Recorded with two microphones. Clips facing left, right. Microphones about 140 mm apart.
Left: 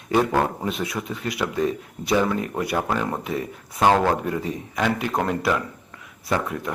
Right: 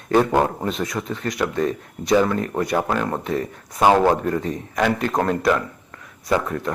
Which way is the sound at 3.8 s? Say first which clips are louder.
Right 3 dB; 10° right (ahead or behind).